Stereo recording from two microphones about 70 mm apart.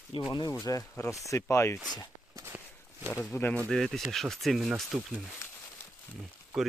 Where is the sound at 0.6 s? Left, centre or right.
Left.